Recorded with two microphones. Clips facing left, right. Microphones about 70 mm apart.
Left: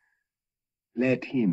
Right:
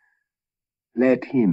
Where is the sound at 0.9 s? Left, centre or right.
Right.